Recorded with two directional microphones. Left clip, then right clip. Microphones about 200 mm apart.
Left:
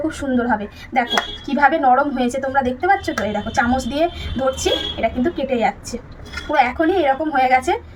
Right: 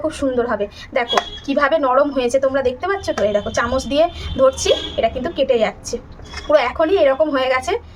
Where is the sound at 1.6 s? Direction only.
50° right (ahead or behind).